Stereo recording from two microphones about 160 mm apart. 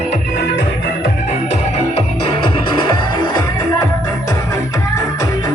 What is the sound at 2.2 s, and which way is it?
Music, 30° left (ahead or behind).